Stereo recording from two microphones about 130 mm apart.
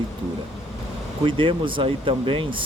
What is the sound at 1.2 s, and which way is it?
Speech, 40° right (ahead or behind).